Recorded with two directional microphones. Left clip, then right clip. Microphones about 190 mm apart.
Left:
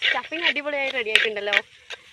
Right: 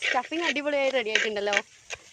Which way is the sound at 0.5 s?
60° right (ahead or behind).